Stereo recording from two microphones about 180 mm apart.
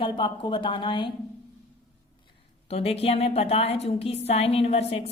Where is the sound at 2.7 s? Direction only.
35° left (ahead or behind).